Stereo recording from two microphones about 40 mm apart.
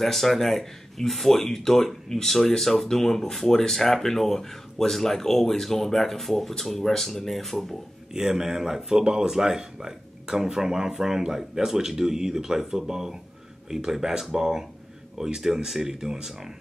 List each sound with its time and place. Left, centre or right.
0.0 s speech: centre
8.1 s speech: centre